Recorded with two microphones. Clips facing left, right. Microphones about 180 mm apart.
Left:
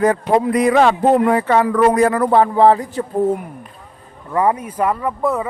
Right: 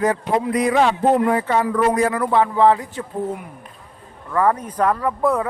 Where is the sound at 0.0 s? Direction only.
55° left (ahead or behind); by 3.4 s 35° left (ahead or behind).